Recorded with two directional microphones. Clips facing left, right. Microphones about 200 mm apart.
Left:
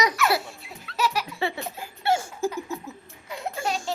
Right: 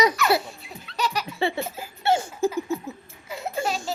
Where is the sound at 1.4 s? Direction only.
25° right (ahead or behind).